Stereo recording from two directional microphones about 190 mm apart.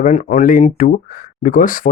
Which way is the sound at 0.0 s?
40° left (ahead or behind).